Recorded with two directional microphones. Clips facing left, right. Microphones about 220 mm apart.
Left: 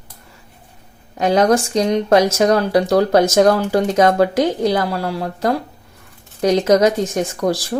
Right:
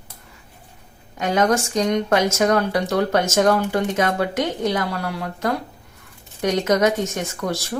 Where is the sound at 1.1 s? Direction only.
35° left (ahead or behind).